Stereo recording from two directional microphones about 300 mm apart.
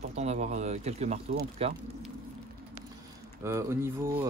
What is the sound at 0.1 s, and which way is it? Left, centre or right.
Speech, right.